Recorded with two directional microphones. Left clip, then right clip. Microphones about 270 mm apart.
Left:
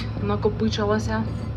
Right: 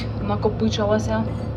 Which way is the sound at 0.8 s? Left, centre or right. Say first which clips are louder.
Right 4 dB; left.